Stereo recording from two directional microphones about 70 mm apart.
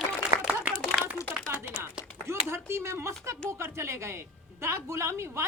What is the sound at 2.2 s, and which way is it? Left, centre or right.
A man's voice, right.